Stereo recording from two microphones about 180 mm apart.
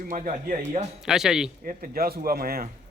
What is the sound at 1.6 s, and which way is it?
Speech, 50° right (ahead or behind).